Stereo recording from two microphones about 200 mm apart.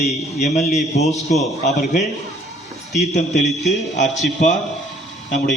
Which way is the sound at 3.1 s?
35° left (ahead or behind).